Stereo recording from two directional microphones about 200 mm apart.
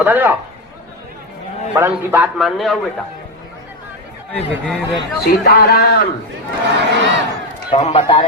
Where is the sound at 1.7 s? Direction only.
10° right (ahead or behind).